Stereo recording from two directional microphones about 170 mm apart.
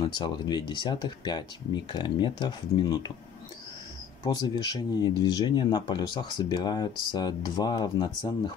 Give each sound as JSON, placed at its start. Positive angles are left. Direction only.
{"t": 0.0, "sound": "speech", "side_deg": 25}
{"t": 4.2, "sound": "speech", "side_deg": 25}